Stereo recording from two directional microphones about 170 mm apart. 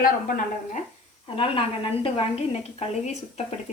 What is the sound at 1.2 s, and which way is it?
Speech, 35° left (ahead or behind).